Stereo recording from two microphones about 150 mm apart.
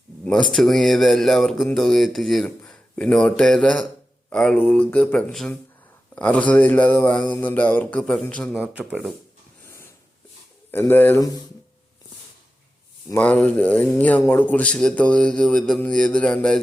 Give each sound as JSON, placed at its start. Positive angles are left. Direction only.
{"t": 0.3, "sound": "speech", "side_deg": 5}
{"t": 8.7, "sound": "speech", "side_deg": -10}
{"t": 9.6, "sound": "snort", "side_deg": 15}
{"t": 10.7, "sound": "speech", "side_deg": 15}
{"t": 13.1, "sound": "speech", "side_deg": 10}